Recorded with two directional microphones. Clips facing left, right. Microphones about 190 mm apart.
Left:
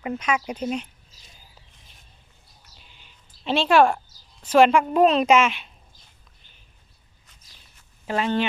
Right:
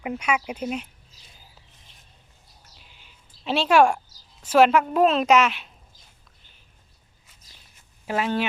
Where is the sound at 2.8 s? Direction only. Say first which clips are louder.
Even; 5° right (ahead or behind).